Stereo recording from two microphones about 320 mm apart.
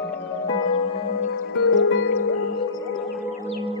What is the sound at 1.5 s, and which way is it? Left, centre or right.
Music, left.